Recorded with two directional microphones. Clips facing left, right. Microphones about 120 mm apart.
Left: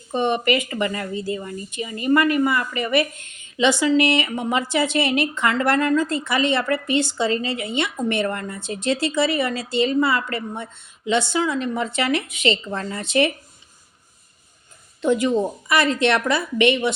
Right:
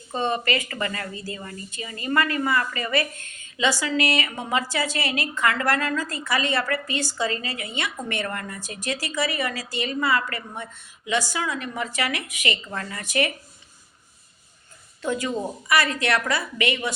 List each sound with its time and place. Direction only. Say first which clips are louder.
0.1 s a woman's voice: left 5 dB; 20° left (ahead or behind)
15.0 s a woman's voice: left 7 dB; 20° left (ahead or behind)